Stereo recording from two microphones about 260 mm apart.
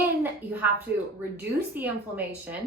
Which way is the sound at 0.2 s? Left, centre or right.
Centre.